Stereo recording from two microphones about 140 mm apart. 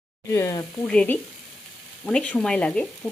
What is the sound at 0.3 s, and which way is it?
Speech, 20° left (ahead or behind).